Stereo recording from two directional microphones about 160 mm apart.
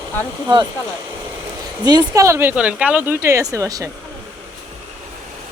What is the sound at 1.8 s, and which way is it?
Speech, 25° right (ahead or behind).